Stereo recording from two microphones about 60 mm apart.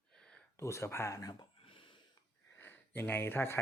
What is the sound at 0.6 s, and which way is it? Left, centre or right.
Speech, left.